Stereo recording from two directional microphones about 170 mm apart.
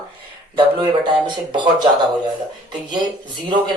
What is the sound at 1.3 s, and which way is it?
Speech, 25° right (ahead or behind).